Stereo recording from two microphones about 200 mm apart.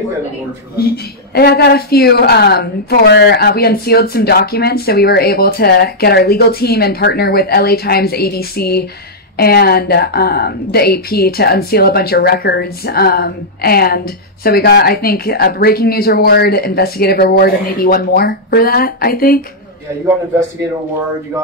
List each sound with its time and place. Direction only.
0.7 s speech: 50° left (ahead or behind)